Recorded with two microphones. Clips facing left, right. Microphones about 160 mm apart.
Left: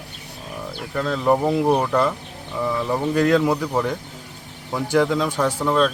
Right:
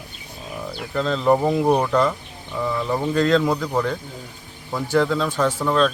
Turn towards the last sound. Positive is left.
turn(degrees=10)  # may be behind; listen again after turning